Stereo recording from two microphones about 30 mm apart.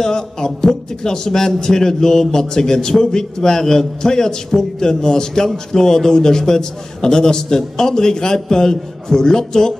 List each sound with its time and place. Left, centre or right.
0.0 s a man's voice: left